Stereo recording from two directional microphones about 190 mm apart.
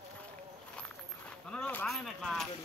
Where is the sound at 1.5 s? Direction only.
10° left (ahead or behind).